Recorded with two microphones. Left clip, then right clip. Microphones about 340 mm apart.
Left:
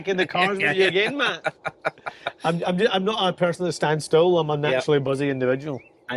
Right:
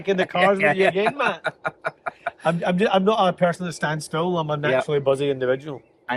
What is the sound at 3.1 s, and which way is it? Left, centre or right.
Speech, centre.